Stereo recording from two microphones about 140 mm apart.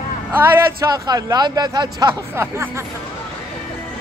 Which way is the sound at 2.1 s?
20° right (ahead or behind).